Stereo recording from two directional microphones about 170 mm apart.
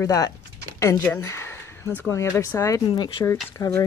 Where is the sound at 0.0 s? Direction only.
20° left (ahead or behind).